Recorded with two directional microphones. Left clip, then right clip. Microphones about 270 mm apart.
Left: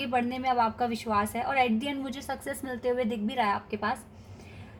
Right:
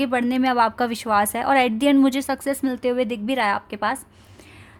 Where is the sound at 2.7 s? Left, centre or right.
Right.